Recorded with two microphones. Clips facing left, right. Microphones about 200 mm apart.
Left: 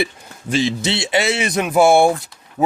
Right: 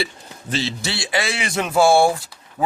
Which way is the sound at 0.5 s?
15° left (ahead or behind).